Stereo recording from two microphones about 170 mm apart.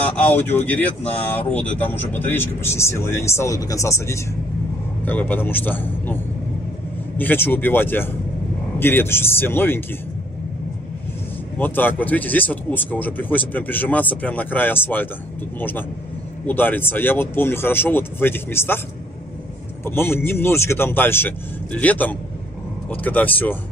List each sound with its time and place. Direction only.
0.1 s speech: 10° left (ahead or behind)
7.2 s speech: 10° left (ahead or behind)
11.5 s speech: 10° left (ahead or behind)
16.4 s speech: 10° left (ahead or behind)
19.8 s speech: 15° left (ahead or behind)